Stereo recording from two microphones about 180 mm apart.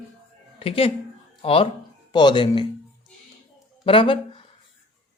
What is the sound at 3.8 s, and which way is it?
Speech, 30° left (ahead or behind).